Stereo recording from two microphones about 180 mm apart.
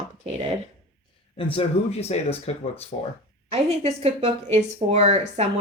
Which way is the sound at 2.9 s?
45° left (ahead or behind).